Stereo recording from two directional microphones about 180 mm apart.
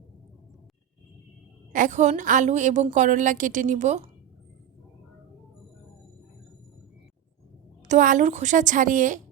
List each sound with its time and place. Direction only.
1.7 s a woman's voice: 45° right (ahead or behind)
7.9 s a woman's voice: 45° right (ahead or behind)